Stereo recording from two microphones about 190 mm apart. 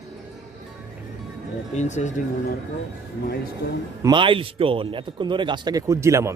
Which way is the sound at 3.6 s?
55° left (ahead or behind).